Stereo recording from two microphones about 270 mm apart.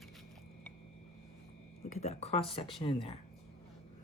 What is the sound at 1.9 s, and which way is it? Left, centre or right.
Speech, left.